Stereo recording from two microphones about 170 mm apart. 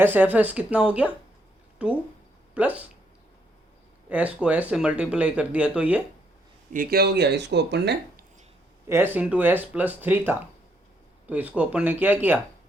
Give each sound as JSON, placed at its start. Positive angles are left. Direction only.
{"t": 0.0, "sound": "speech", "side_deg": -10}
{"t": 4.1, "sound": "speech", "side_deg": -10}
{"t": 6.7, "sound": "speech", "side_deg": -70}
{"t": 8.9, "sound": "speech", "side_deg": -10}